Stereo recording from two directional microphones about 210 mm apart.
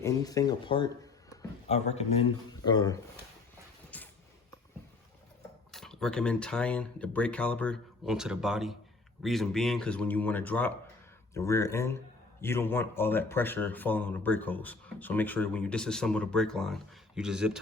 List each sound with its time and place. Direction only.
0.0 s a man's voice: 15° left (ahead or behind)
3.9 s a sound: 5° left (ahead or behind)
5.7 s speech: centre (ahead or behind)